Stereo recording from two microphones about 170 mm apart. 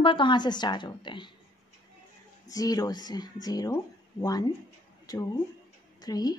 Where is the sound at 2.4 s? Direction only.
20° left (ahead or behind).